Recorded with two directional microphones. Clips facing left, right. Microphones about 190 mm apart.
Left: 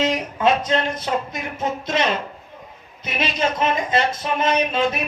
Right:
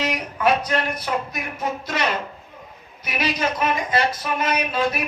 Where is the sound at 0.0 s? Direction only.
25° left (ahead or behind).